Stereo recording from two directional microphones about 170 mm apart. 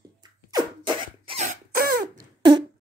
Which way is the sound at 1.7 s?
60° right (ahead or behind).